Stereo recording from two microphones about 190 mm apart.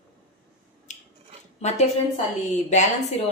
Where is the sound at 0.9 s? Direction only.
40° left (ahead or behind).